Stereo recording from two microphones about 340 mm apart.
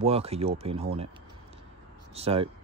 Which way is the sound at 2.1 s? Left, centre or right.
Centre.